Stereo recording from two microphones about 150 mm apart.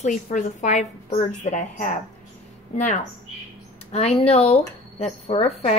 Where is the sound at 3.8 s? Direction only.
45° left (ahead or behind).